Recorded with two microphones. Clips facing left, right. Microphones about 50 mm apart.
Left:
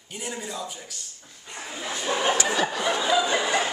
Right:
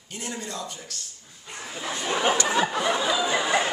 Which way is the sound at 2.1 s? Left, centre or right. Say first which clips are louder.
Right 1 dB; centre.